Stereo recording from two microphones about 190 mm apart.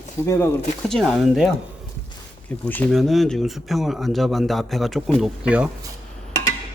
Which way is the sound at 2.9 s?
Centre (ahead or behind).